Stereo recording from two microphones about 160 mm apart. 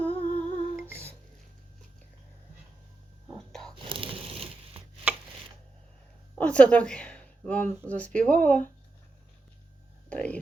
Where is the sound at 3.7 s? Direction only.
35° right (ahead or behind).